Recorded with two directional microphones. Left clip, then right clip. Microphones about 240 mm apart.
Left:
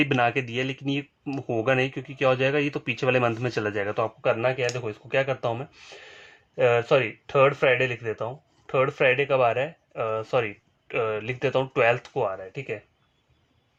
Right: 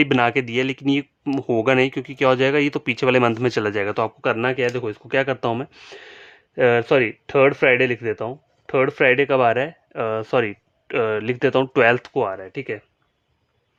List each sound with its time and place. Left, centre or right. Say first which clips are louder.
0.0 s speech: right 5 dB; right